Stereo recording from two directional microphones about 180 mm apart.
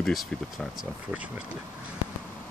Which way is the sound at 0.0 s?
5° left (ahead or behind).